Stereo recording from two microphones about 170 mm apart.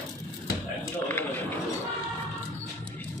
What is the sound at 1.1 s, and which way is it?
Speech, 10° left (ahead or behind).